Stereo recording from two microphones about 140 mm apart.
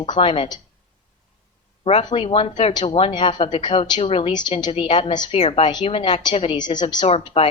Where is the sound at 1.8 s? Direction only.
45° left (ahead or behind).